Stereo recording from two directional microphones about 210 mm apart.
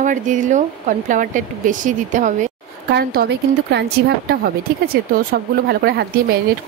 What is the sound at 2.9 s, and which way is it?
A woman's voice, 45° right (ahead or behind).